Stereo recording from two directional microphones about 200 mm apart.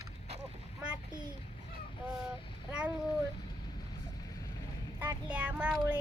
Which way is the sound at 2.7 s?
5° right (ahead or behind).